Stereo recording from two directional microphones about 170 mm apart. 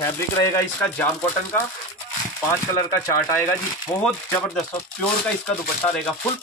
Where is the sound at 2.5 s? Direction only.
20° left (ahead or behind).